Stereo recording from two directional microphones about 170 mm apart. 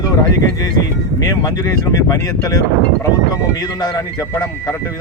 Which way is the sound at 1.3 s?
20° left (ahead or behind).